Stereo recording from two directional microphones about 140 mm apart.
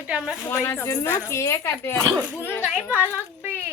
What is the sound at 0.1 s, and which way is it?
Speech, 5° right (ahead or behind).